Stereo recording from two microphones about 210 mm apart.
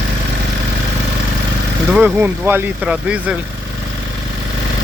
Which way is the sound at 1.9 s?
5° right (ahead or behind).